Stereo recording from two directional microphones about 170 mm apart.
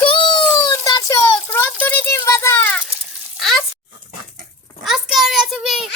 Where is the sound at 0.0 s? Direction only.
30° left (ahead or behind); by 2.8 s 10° left (ahead or behind).